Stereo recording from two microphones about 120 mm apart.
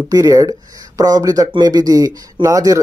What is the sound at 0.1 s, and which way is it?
Speech, 30° right (ahead or behind).